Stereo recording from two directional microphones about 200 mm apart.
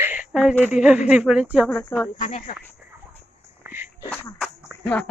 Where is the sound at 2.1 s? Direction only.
40° left (ahead or behind).